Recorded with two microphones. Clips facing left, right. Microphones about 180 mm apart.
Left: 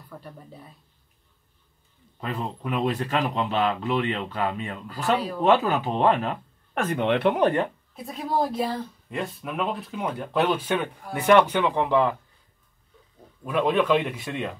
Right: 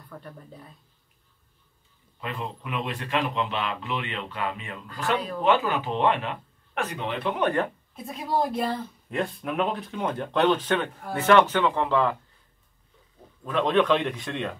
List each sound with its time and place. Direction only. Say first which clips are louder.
0.1 s speech: even; 5° left (ahead or behind)
2.1 s speech: left 3 dB; 40° left (ahead or behind); by 7.3 s 65° left (ahead or behind)
7.9 s speech: left 1 dB; centre (ahead or behind)
13.4 s speech: even; 10° left (ahead or behind)